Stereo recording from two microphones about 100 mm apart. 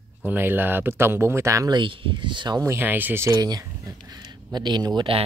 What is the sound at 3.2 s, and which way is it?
Speech, 40° right (ahead or behind).